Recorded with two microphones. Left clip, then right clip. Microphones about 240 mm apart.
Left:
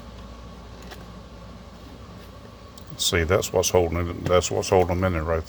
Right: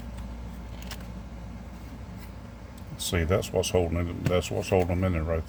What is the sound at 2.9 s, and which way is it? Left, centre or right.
Speech, centre.